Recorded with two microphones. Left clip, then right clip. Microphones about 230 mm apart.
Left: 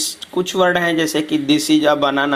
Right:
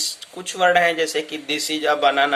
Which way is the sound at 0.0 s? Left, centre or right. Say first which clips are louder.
Left 6 dB; centre.